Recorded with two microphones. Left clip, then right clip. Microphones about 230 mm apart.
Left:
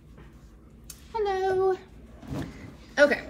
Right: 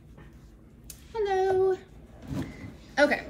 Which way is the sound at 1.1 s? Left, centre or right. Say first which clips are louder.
Even; centre.